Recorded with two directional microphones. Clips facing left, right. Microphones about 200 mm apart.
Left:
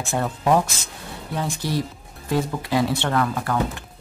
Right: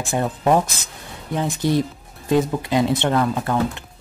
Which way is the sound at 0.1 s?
15° right (ahead or behind).